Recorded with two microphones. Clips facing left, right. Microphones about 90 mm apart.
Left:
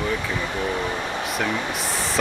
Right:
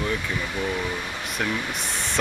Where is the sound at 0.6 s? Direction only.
25° left (ahead or behind).